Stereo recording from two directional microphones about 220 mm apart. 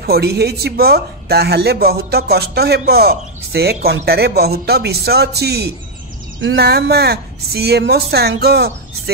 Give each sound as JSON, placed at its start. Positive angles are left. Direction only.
{"t": 0.0, "sound": "a man's voice", "side_deg": -45}